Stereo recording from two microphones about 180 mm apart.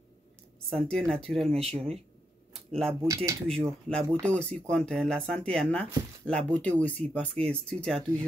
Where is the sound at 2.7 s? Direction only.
5° left (ahead or behind).